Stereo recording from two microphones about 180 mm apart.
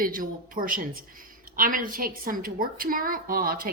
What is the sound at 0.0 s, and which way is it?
A woman's voice, 50° right (ahead or behind).